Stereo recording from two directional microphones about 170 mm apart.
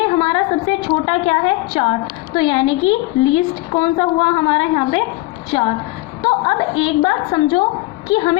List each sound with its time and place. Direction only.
0.0 s a woman's voice: 30° left (ahead or behind)
6.2 s a woman's voice: 30° left (ahead or behind)